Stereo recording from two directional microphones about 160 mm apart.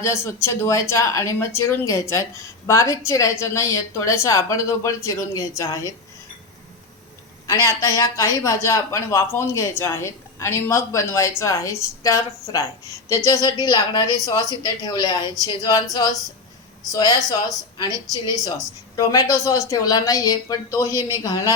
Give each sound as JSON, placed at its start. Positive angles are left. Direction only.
{"t": 0.0, "sound": "speech", "side_deg": 15}
{"t": 7.4, "sound": "speech", "side_deg": 20}